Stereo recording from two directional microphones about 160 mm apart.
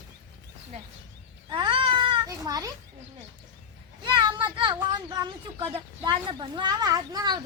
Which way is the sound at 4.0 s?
30° right (ahead or behind).